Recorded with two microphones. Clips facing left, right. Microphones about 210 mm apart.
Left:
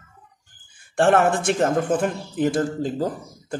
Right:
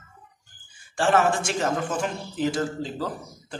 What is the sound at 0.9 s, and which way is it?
Speech, 60° left (ahead or behind).